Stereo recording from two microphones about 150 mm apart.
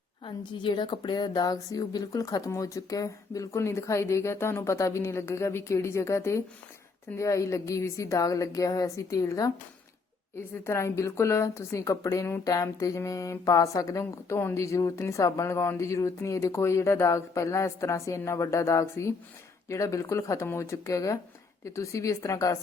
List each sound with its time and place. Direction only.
0.3 s a woman's voice: 30° left (ahead or behind)